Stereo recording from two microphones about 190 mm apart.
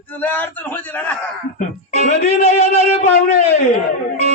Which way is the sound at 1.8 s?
40° left (ahead or behind).